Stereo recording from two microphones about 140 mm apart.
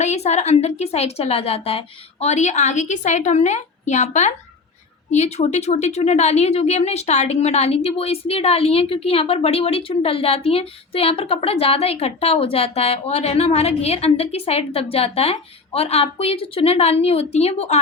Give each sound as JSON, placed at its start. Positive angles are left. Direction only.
{"t": 0.0, "sound": "a woman's voice", "side_deg": 55}